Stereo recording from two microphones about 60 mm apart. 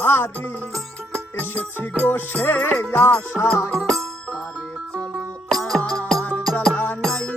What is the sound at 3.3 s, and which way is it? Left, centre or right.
Music, centre.